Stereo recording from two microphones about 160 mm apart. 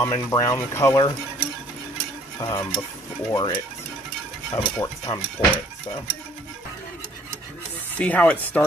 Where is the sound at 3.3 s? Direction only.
25° left (ahead or behind).